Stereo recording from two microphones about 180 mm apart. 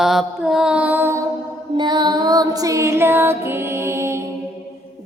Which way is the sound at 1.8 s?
25° right (ahead or behind).